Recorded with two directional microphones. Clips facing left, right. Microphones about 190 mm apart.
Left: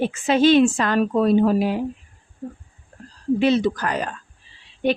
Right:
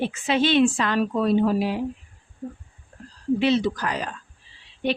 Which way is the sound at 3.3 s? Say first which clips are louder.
Left 3 dB; 50° left (ahead or behind).